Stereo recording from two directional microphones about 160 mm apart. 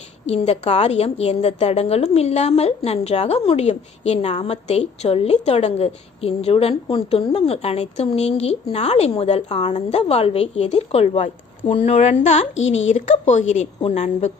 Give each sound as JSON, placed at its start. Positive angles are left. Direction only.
{"t": 0.3, "sound": "a woman's voice", "side_deg": 40}